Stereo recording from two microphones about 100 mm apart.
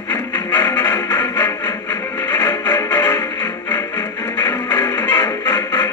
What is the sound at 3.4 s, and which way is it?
Music, 20° left (ahead or behind).